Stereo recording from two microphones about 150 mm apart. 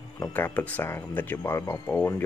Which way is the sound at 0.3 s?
10° left (ahead or behind).